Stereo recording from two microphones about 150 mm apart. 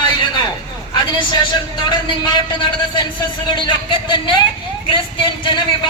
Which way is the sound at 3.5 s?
30° left (ahead or behind).